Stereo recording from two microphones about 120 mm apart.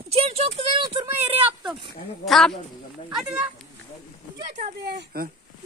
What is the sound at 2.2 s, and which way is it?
Speech, centre (ahead or behind).